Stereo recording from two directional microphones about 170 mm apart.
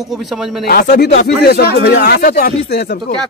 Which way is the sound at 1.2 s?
70° left (ahead or behind).